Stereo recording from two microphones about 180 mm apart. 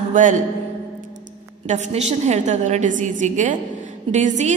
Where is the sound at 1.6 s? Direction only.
40° right (ahead or behind).